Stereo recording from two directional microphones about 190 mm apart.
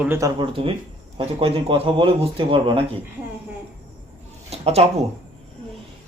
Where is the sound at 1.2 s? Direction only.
30° right (ahead or behind).